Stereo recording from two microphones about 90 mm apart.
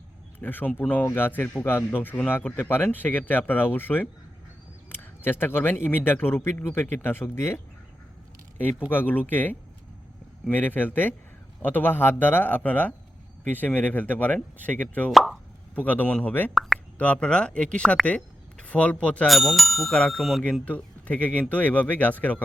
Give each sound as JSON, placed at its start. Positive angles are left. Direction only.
{"t": 0.3, "sound": "a man's voice", "side_deg": 20}
{"t": 4.9, "sound": "a sound", "side_deg": 20}
{"t": 5.7, "sound": "a man's voice", "side_deg": 20}
{"t": 8.9, "sound": "a man's voice", "side_deg": 20}
{"t": 15.1, "sound": "speech", "side_deg": 0}
{"t": 15.7, "sound": "a man's voice", "side_deg": 20}
{"t": 16.6, "sound": "plop", "side_deg": 0}
{"t": 17.0, "sound": "speech", "side_deg": 15}
{"t": 19.3, "sound": "speech", "side_deg": 0}
{"t": 20.4, "sound": "speech", "side_deg": 15}